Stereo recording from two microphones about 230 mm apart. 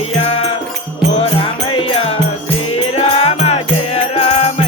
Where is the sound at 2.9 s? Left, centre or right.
Left.